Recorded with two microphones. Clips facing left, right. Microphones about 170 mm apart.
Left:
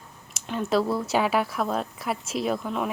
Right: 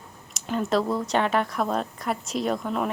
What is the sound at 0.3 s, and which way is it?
A woman's voice, centre (ahead or behind).